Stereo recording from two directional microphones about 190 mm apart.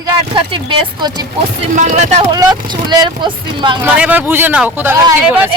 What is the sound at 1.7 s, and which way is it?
Speech, 40° right (ahead or behind).